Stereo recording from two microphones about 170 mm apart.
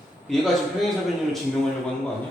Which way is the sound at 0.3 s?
Centre (ahead or behind).